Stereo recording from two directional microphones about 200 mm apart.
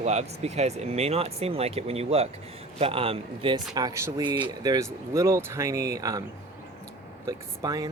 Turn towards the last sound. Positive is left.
turn(degrees=-20)  # may be behind; listen again after turning